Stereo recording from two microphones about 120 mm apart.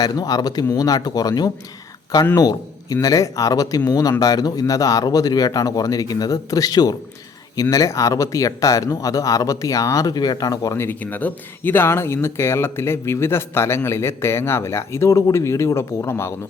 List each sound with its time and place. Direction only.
0.0 s speech: 30° left (ahead or behind)
10.8 s speech: 15° left (ahead or behind)